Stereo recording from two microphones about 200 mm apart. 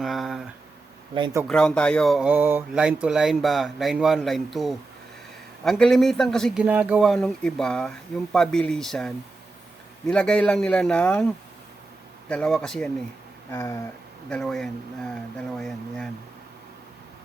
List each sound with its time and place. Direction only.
0.0 s a sound: centre (ahead or behind)
1.1 s speech: 25° right (ahead or behind)
1.5 s speech: 5° left (ahead or behind)
12.3 s speech: 5° left (ahead or behind)
13.5 s a sound: 15° left (ahead or behind)
14.3 s speech: 5° left (ahead or behind)